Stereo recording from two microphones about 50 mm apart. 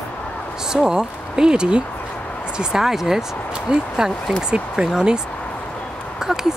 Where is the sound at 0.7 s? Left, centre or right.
Centre.